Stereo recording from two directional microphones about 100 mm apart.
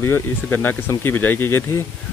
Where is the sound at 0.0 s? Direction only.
20° left (ahead or behind).